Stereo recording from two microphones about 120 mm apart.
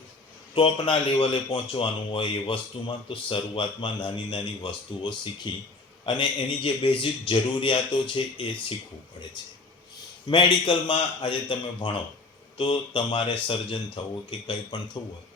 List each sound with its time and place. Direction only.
0.5 s speech: 45° left (ahead or behind)
10.2 s speech: 45° left (ahead or behind)